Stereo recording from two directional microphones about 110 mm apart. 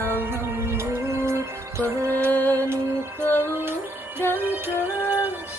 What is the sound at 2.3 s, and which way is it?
Music, 15° left (ahead or behind).